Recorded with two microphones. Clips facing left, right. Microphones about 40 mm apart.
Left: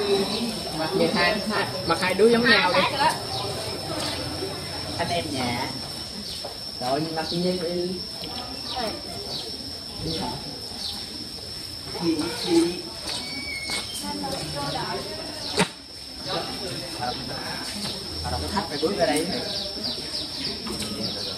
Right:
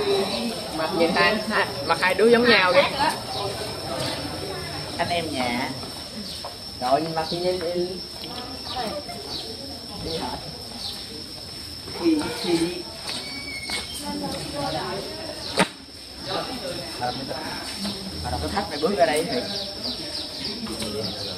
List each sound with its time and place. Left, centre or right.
0.0 s a sound: centre
1.9 s speech: right
2.4 s a sound: centre
5.3 s speech: centre
6.8 s speech: centre
12.0 s speech: centre
15.6 s a sound: centre
16.3 s speech: centre
20.4 s bird: centre